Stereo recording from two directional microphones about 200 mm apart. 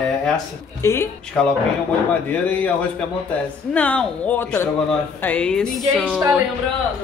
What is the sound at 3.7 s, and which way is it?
Speech, 5° left (ahead or behind).